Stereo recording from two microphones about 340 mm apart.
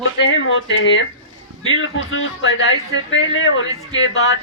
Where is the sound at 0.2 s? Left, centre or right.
Left.